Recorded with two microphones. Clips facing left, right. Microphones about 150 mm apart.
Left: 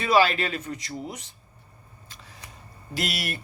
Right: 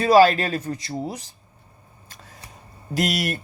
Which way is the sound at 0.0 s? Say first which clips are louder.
Right 6 dB; 40° right (ahead or behind).